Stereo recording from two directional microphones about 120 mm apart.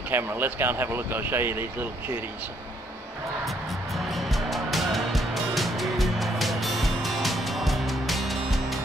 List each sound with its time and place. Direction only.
0.1 s speech: 20° right (ahead or behind)
3.4 s music: centre (ahead or behind)